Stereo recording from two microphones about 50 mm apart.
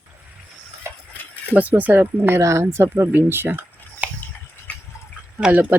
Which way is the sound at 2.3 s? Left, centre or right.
Right.